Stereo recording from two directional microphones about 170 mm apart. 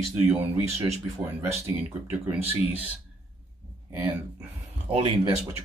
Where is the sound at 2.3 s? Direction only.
10° right (ahead or behind).